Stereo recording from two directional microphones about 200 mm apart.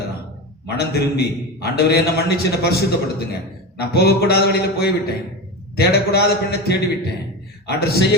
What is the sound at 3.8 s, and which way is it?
A man's voice, 50° left (ahead or behind).